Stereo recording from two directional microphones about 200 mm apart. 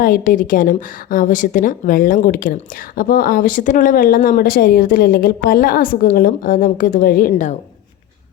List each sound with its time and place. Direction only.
0.0 s speech: 40° left (ahead or behind)